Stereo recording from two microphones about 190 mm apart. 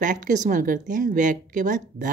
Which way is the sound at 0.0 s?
40° right (ahead or behind).